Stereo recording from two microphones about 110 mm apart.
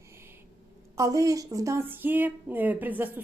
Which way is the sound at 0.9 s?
30° right (ahead or behind).